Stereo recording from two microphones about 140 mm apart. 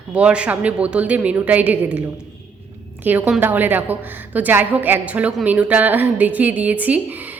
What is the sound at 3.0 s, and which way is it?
A woman's voice, 10° right (ahead or behind).